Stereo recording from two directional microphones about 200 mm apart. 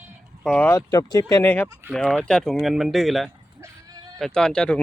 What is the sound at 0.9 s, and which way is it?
Speech, 20° left (ahead or behind).